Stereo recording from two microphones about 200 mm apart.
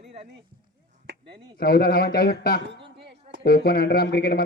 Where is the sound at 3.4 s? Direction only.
50° left (ahead or behind).